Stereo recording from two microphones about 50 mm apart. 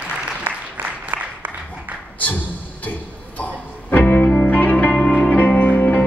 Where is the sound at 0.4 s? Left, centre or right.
Right.